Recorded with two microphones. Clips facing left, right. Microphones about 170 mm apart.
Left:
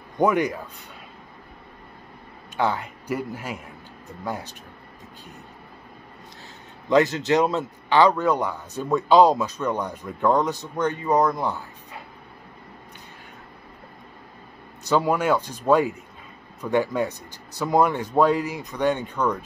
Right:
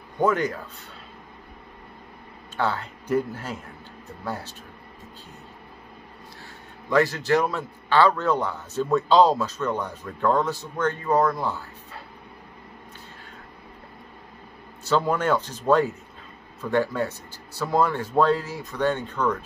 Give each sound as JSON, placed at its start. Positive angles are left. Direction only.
{"t": 0.2, "sound": "a man's voice", "side_deg": 15}
{"t": 2.5, "sound": "a man's voice", "side_deg": 15}
{"t": 6.9, "sound": "a man's voice", "side_deg": 20}
{"t": 14.9, "sound": "a man's voice", "side_deg": 15}